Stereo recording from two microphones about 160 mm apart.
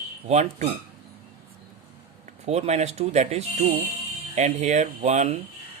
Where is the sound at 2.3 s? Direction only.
40° right (ahead or behind).